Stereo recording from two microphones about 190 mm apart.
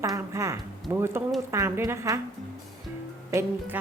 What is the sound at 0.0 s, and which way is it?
A woman's voice, 15° right (ahead or behind).